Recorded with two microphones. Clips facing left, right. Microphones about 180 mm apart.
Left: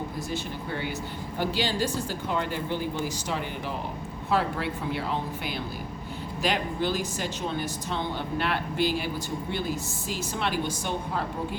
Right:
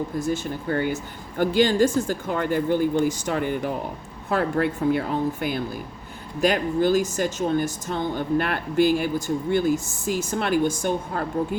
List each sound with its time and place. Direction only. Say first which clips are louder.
0.2 s a woman's voice: right 7 dB; 50° right (ahead or behind)